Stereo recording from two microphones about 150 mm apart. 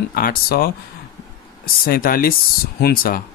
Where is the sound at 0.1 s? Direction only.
75° left (ahead or behind).